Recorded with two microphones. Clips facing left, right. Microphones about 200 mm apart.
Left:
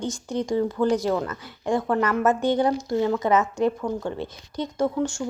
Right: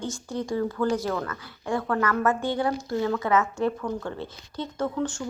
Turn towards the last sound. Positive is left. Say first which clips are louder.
# left 4 dB
turn(degrees=10)  # may be behind; listen again after turning